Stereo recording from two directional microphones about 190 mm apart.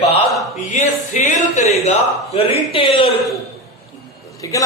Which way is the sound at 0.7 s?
40° left (ahead or behind).